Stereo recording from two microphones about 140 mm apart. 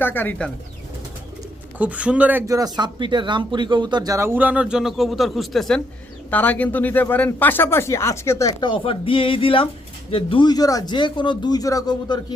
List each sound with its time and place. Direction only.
0.0 s speech: 15° left (ahead or behind)
1.8 s speech: 10° right (ahead or behind)
2.5 s speech: 25° right (ahead or behind); by 8.5 s 20° left (ahead or behind)
8.6 s speech: 40° left (ahead or behind)